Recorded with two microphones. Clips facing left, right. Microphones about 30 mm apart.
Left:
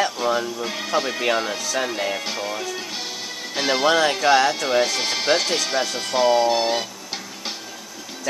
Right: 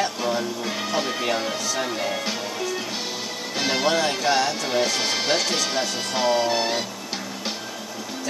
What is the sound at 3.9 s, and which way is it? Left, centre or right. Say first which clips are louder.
Speech: left 6 dB; left.